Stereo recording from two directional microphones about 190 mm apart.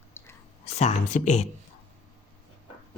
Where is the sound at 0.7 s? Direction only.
35° left (ahead or behind).